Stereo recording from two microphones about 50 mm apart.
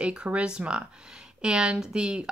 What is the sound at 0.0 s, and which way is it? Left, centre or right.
Speech, right.